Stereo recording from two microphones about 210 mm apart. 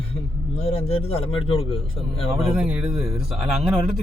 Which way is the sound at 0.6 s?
30° left (ahead or behind).